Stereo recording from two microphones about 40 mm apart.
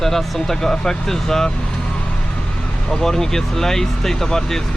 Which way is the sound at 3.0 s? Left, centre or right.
Centre.